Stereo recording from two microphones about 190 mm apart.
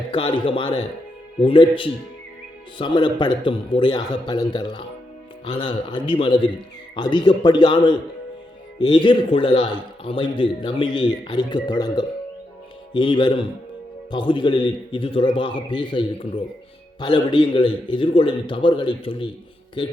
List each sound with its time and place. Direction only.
0.1 s speech: 25° left (ahead or behind)